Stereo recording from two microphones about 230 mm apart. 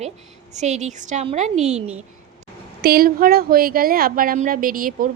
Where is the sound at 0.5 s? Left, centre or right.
Right.